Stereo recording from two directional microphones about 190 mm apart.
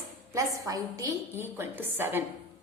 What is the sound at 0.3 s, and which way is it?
A woman's voice, 15° right (ahead or behind).